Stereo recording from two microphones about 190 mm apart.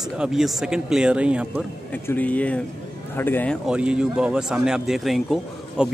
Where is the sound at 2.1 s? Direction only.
10° left (ahead or behind).